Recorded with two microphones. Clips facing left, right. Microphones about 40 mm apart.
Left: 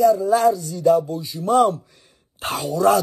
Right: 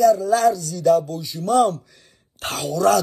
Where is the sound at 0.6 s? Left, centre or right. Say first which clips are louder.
Even; left.